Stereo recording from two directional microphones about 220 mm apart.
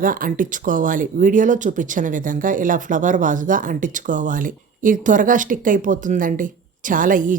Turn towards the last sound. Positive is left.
turn(degrees=-35)  # may be behind; listen again after turning